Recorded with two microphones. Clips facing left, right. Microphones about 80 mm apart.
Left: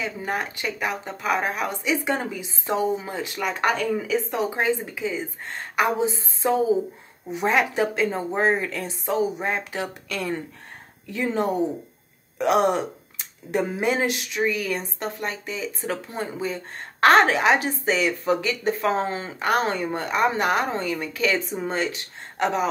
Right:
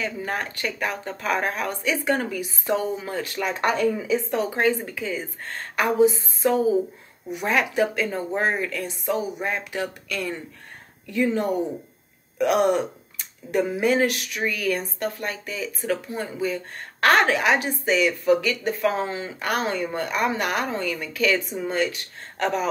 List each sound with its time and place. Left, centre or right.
0.0 s speech: centre